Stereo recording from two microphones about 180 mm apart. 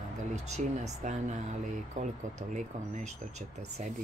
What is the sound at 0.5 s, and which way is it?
Speech, 40° right (ahead or behind).